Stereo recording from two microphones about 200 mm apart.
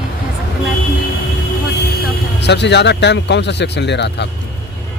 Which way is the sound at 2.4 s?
60° left (ahead or behind).